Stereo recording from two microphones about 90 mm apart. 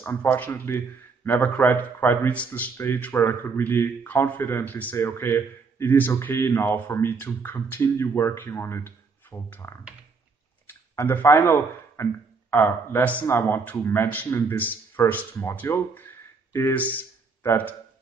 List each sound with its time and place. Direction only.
0.0 s a man's voice: 20° left (ahead or behind)
4.9 s a man's voice: 25° left (ahead or behind)